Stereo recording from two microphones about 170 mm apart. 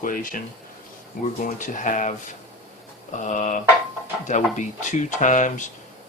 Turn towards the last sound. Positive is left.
turn(degrees=45)  # may be behind; listen again after turning